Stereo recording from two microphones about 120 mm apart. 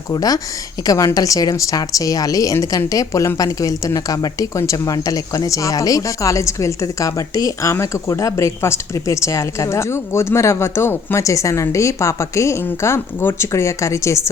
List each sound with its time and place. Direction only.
0.1 s a woman's voice: 30° left (ahead or behind)